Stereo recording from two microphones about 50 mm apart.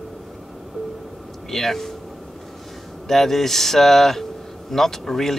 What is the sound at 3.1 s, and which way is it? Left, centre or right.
A man's voice, centre.